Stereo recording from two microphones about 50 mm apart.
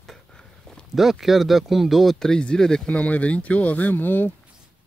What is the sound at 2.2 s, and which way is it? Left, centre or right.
Speech, centre.